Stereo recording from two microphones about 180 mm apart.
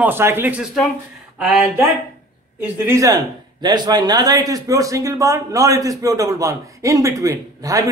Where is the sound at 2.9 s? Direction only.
20° right (ahead or behind).